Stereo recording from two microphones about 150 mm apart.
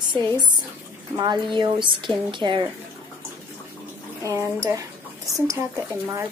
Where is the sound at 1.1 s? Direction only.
25° right (ahead or behind).